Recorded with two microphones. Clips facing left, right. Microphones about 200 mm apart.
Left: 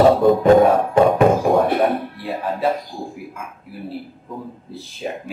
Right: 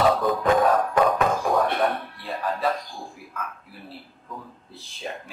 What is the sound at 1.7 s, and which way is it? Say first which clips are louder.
Music: left 6 dB; 15° left (ahead or behind).